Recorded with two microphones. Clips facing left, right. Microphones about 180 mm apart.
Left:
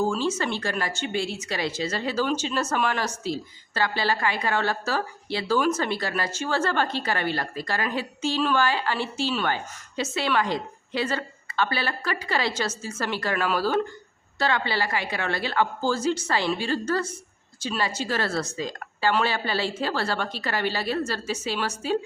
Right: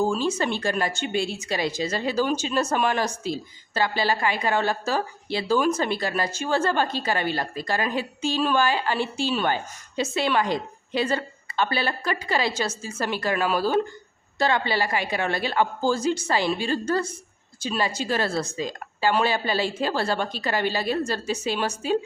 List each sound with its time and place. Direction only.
0.0 s a woman's voice: 15° right (ahead or behind)